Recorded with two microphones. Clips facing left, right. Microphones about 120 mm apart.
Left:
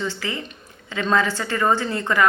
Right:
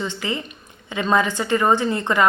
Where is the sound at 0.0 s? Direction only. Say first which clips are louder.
Right 1 dB; 20° right (ahead or behind).